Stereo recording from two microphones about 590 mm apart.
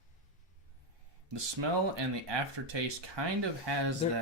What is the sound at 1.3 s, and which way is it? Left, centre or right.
Speech, right.